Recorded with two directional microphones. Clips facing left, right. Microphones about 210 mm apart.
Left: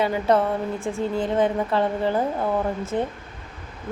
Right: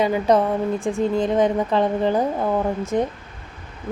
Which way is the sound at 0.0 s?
15° right (ahead or behind).